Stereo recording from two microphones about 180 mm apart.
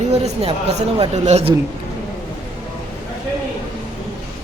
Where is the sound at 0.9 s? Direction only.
40° right (ahead or behind).